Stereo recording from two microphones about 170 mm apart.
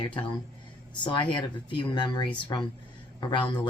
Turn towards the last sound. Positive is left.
turn(degrees=30)  # may be behind; listen again after turning